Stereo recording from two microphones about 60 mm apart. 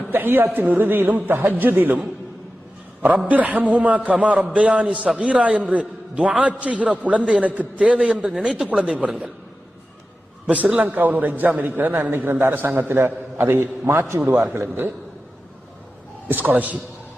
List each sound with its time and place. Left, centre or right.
0.1 s a man's voice: right
3.2 s a man's voice: right
7.8 s a man's voice: centre
10.4 s a man's voice: right
16.3 s a man's voice: right